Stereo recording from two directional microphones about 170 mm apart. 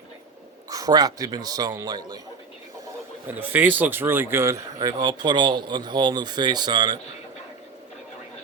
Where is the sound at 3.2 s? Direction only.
10° right (ahead or behind).